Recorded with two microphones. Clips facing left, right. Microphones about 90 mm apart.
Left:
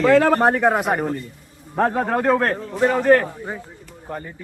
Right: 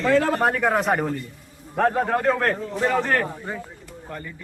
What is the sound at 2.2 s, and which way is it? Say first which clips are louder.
Speech: left 3 dB; 20° left (ahead or behind).